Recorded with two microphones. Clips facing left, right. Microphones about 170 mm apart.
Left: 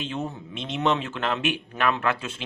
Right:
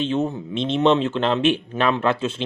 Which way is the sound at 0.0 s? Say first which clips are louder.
Right 9 dB; 25° right (ahead or behind).